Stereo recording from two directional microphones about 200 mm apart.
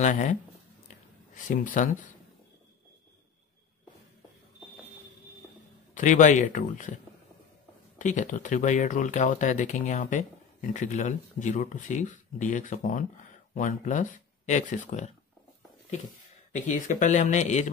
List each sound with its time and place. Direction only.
0.0 s speech: 35° left (ahead or behind)
5.9 s speech: 40° left (ahead or behind)
8.0 s speech: 40° left (ahead or behind)
16.5 s speech: 40° left (ahead or behind)